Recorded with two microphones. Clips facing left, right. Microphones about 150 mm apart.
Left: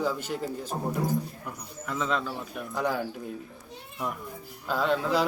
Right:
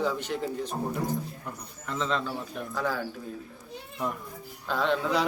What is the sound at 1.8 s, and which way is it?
A man's voice, 5° left (ahead or behind).